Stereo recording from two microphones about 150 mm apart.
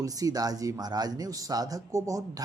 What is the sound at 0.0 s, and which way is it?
Speech, 25° right (ahead or behind).